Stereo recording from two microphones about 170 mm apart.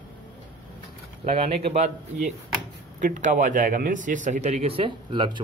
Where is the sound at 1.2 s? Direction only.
35° right (ahead or behind).